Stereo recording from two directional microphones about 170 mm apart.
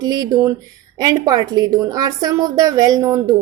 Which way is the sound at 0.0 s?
25° right (ahead or behind).